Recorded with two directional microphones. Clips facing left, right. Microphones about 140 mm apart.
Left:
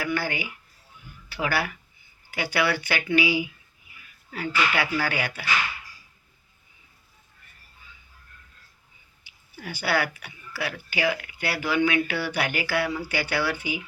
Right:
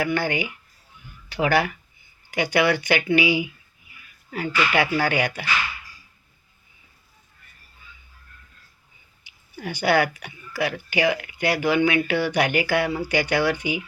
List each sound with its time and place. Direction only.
0.0 s speech: 20° right (ahead or behind)
9.6 s speech: 15° right (ahead or behind)